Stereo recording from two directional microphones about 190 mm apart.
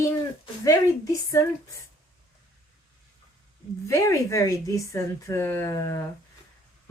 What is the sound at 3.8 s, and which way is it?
Speech, 15° left (ahead or behind).